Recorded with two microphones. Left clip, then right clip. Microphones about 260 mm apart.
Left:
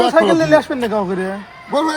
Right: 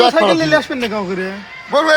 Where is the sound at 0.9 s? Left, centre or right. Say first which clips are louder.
Left 2 dB; centre.